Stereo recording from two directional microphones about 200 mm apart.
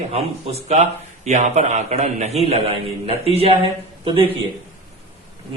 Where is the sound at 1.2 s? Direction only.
35° right (ahead or behind).